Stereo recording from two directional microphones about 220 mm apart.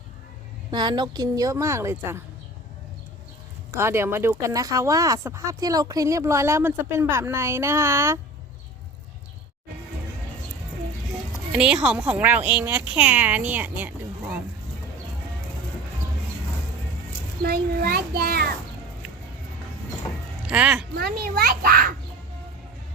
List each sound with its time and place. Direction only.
0.7 s speech: 20° right (ahead or behind)
3.7 s speech: 10° right (ahead or behind)
11.5 s a woman's voice: 5° right (ahead or behind)
17.4 s a child's voice: 45° right (ahead or behind)
20.5 s a woman's voice: 5° right (ahead or behind)
20.9 s a child's voice: 45° right (ahead or behind)